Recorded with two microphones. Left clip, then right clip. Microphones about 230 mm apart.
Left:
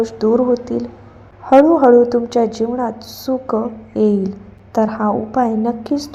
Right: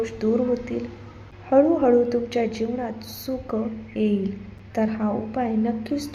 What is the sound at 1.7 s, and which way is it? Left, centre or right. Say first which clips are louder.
Speech: left 9 dB; centre.